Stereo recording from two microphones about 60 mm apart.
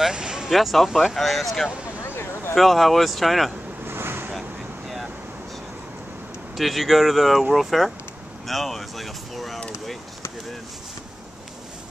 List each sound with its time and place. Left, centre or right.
0.0 s a sound: centre
0.5 s speech: centre
2.0 s a sound: left
2.5 s speech: centre
3.8 s vehicle: right
4.3 s air conditioning: centre
6.5 s speech: centre